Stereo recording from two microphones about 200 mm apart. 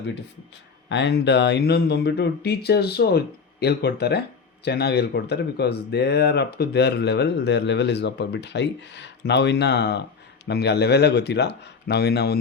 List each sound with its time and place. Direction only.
0.9 s speech: 60° left (ahead or behind)